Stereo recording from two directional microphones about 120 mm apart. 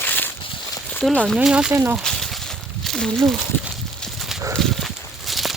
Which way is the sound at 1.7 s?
20° right (ahead or behind).